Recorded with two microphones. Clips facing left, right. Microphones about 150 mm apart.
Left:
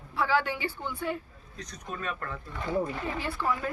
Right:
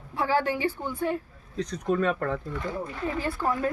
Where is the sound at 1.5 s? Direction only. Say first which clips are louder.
Right 13 dB; 90° right.